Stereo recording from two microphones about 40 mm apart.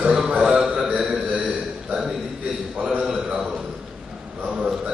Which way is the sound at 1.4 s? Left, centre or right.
Centre.